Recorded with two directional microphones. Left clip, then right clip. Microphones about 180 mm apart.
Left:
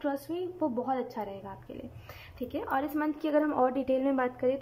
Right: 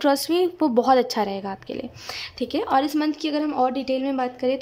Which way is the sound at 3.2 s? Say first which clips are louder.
Right 1 dB; 10° right (ahead or behind).